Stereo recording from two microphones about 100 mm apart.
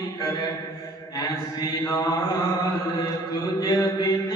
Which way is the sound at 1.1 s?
35° left (ahead or behind).